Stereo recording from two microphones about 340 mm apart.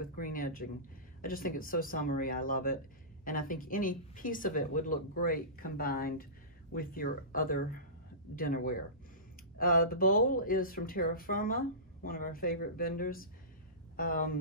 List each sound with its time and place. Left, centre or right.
0.1 s speech: left